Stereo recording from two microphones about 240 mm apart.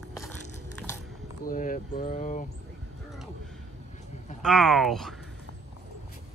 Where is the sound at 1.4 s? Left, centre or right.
Left.